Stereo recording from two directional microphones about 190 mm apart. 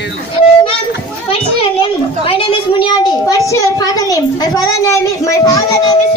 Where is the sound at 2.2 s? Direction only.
30° left (ahead or behind).